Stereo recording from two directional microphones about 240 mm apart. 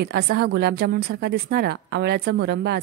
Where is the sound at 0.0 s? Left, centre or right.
Right.